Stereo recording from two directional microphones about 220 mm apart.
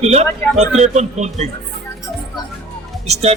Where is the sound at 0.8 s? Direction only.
30° right (ahead or behind).